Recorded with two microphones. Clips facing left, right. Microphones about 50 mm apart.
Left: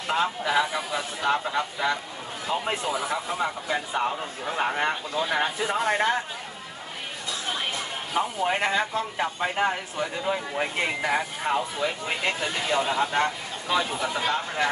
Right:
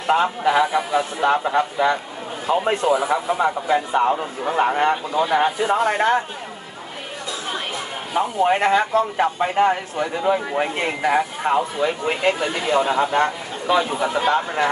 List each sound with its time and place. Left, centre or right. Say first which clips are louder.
0.0 s a man's voice: right 7 dB; right
8.1 s speech: right 7 dB; centre